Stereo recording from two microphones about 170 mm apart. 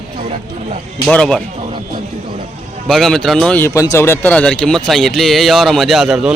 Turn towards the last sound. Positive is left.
turn(degrees=0)  # may be behind; listen again after turning